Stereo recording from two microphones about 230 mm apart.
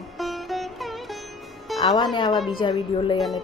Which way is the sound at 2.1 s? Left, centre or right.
Centre.